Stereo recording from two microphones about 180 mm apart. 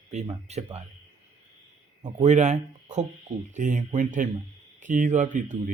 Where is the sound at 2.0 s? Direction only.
40° right (ahead or behind).